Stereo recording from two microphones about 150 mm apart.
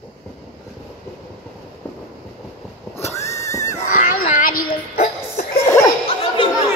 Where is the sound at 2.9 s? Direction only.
20° left (ahead or behind).